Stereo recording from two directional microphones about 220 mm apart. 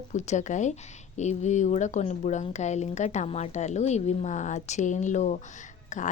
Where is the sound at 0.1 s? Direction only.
30° left (ahead or behind).